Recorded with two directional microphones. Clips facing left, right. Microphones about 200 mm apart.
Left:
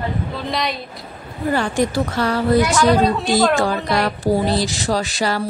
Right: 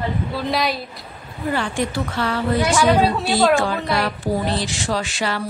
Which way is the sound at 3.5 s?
40° left (ahead or behind).